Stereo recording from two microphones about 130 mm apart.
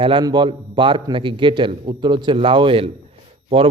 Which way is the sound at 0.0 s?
40° right (ahead or behind).